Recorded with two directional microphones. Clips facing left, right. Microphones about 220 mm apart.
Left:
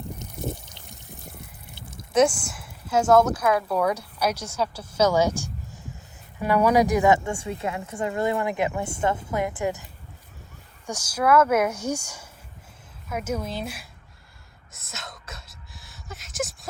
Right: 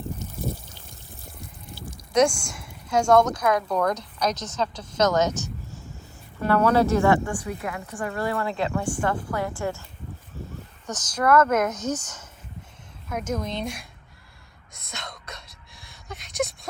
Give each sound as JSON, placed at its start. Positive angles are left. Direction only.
{"t": 0.7, "sound": "water", "side_deg": 20}
{"t": 2.1, "sound": "speech", "side_deg": 5}
{"t": 10.8, "sound": "speech", "side_deg": 10}
{"t": 14.7, "sound": "whispering", "side_deg": 5}